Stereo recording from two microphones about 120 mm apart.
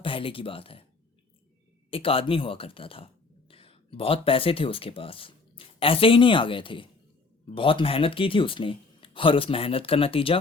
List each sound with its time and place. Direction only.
0.0 s speech: 45° left (ahead or behind)
1.9 s speech: 50° left (ahead or behind)